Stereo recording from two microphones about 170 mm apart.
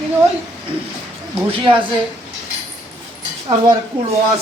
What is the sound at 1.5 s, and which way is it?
Speech, 30° right (ahead or behind).